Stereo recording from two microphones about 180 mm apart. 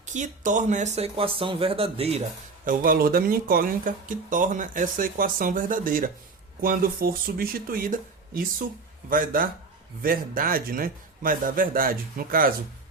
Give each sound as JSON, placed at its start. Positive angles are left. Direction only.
{"t": 0.1, "sound": "speech", "side_deg": -45}
{"t": 2.6, "sound": "speech", "side_deg": -50}